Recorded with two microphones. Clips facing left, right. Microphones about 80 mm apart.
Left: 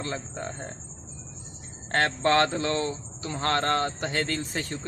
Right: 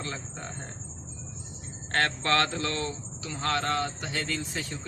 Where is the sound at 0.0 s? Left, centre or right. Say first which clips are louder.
Left 4 dB; left.